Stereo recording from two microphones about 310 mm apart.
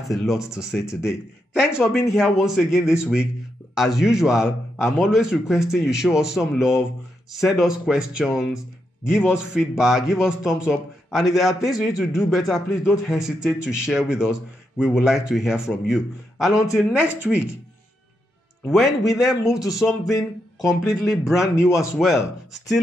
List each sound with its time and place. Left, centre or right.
0.1 s speech: centre
18.7 s speech: centre